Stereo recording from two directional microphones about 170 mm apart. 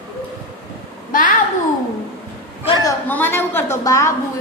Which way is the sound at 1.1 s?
50° left (ahead or behind).